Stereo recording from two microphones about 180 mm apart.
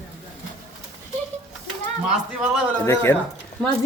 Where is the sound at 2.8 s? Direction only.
15° left (ahead or behind).